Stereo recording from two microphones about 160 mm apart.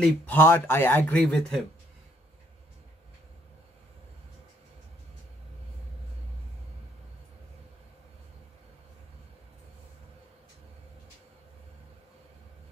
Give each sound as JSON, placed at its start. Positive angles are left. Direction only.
{"t": 0.0, "sound": "speech", "side_deg": 15}